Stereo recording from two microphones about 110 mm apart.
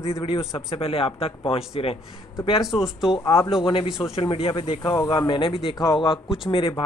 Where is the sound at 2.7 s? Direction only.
5° right (ahead or behind).